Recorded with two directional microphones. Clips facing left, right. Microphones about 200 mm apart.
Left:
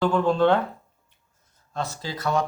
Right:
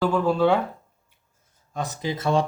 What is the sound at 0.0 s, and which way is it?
Speech, 5° right (ahead or behind).